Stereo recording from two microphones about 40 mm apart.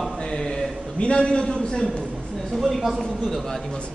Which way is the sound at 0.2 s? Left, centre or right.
Centre.